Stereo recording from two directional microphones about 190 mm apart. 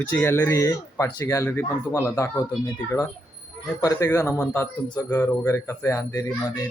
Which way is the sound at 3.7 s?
15° left (ahead or behind).